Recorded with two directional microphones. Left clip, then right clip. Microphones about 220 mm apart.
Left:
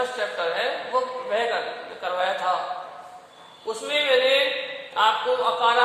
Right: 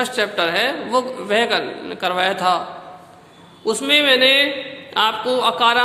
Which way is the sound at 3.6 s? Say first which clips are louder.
Right 8 dB; 40° right (ahead or behind).